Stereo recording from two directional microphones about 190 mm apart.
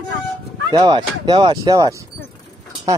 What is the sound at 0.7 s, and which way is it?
Speech, 20° right (ahead or behind).